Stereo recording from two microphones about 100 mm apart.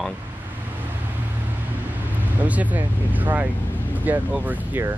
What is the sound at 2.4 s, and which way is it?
Speech, 15° right (ahead or behind).